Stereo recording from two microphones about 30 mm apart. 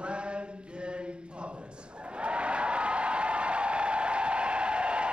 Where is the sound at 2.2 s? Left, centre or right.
Right.